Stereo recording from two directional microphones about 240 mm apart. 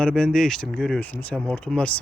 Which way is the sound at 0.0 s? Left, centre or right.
Centre.